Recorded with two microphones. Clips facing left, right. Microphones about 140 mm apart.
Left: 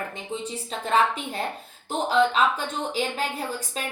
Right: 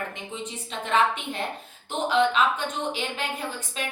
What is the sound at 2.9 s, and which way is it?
Speech, 35° left (ahead or behind).